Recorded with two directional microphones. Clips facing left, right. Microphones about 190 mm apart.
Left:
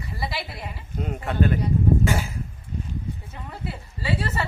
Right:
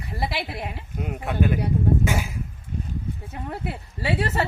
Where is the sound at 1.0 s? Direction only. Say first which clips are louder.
Left 1 dB; 10° right (ahead or behind).